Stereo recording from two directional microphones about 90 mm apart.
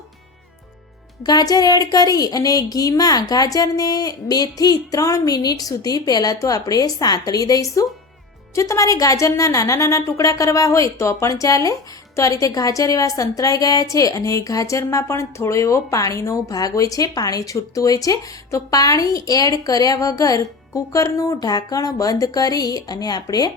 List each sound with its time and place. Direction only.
1.2 s speech: 50° left (ahead or behind)